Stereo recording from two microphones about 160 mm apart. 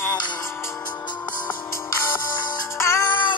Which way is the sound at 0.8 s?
25° left (ahead or behind).